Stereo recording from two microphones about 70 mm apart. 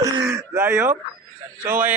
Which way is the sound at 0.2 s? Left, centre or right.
Right.